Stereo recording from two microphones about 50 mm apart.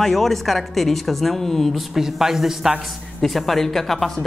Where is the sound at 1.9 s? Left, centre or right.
Centre.